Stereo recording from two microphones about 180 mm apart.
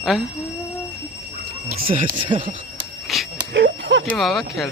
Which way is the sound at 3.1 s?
Centre (ahead or behind).